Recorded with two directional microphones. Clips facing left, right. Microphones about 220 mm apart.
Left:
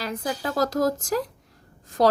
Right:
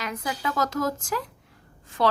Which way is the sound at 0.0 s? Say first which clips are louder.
Left 2 dB; 35° left (ahead or behind).